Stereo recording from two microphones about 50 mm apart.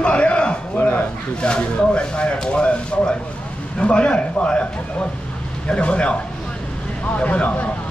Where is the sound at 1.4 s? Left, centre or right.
Centre.